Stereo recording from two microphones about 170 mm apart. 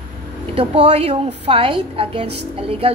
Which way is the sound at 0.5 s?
35° right (ahead or behind).